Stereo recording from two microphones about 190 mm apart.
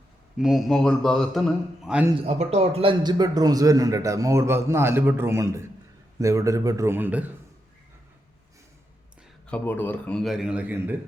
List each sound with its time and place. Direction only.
0.3 s a man's voice: centre (ahead or behind)
2.1 s a man's voice: 30° right (ahead or behind); by 7.3 s 10° right (ahead or behind)
9.5 s a man's voice: 10° left (ahead or behind); by 10.9 s 10° right (ahead or behind)